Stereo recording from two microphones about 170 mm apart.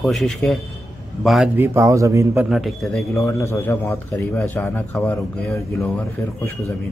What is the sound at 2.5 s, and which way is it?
Speech, centre (ahead or behind).